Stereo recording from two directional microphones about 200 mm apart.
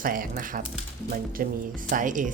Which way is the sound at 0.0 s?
45° right (ahead or behind).